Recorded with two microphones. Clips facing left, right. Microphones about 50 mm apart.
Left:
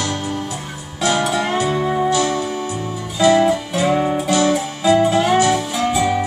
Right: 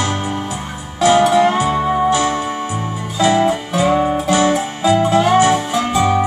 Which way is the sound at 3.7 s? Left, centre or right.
Centre.